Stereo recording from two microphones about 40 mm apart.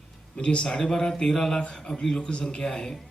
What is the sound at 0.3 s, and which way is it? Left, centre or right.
Speech, left.